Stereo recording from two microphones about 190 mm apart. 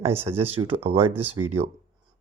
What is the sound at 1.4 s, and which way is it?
Speech, 20° right (ahead or behind).